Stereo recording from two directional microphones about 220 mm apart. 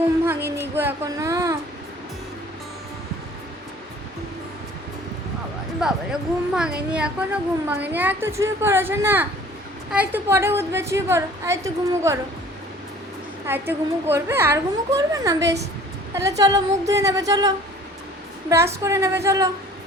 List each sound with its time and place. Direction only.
0.3 s speech: 10° right (ahead or behind)
5.8 s a woman's voice: centre (ahead or behind)
13.5 s a woman's voice: 10° right (ahead or behind)